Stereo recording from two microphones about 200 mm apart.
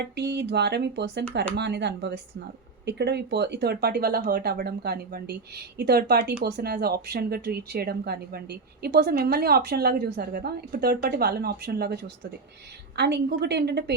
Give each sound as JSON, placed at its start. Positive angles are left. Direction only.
{"t": 0.2, "sound": "speech", "side_deg": -55}